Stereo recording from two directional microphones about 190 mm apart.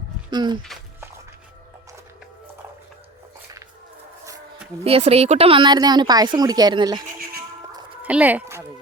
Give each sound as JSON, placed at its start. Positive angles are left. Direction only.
{"t": 0.3, "sound": "speech", "side_deg": -20}
{"t": 4.8, "sound": "speech", "side_deg": -30}
{"t": 8.0, "sound": "speech", "side_deg": -10}